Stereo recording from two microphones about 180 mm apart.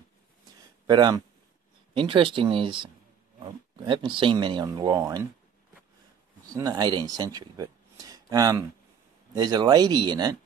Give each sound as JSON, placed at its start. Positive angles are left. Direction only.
{"t": 0.8, "sound": "speech", "side_deg": -20}
{"t": 6.4, "sound": "speech", "side_deg": -20}